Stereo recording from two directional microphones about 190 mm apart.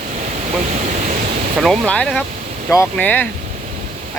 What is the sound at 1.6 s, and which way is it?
Speech, centre (ahead or behind).